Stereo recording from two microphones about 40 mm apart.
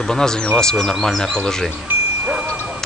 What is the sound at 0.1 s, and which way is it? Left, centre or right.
Speech, centre.